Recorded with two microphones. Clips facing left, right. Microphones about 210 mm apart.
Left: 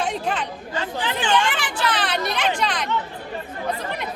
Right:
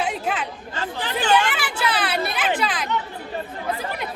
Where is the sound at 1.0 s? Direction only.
40° right (ahead or behind).